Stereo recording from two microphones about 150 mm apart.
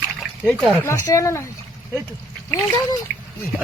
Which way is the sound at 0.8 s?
20° left (ahead or behind).